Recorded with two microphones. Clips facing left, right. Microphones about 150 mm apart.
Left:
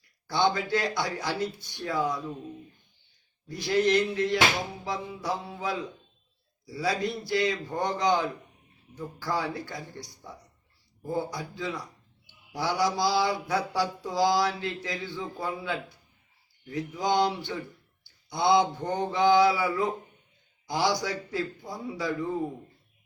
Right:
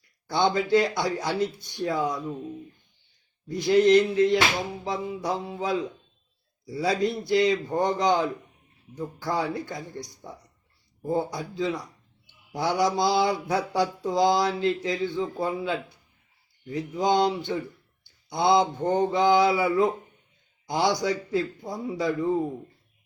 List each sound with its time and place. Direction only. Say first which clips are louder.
0.3 s mantra: right 3 dB; 25° right (ahead or behind)
3.5 s mantra: right 6 dB; 20° right (ahead or behind)